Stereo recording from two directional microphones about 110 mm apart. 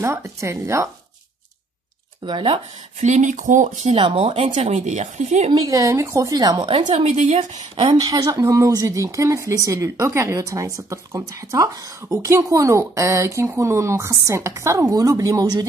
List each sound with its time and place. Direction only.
0.0 s a woman's voice: 25° right (ahead or behind)
2.2 s speech: 45° right (ahead or behind)
3.0 s speech: 90° right
3.9 s speech: 55° right (ahead or behind); by 5.5 s 90° right
5.7 s a woman's voice: 30° right (ahead or behind)
6.9 s speech: 65° right (ahead or behind); by 7.6 s 90° right
7.7 s a woman's voice: 45° right (ahead or behind)